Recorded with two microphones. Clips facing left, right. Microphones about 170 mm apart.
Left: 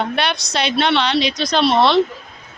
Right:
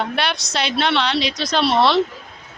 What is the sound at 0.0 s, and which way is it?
A woman's voice, 5° right (ahead or behind).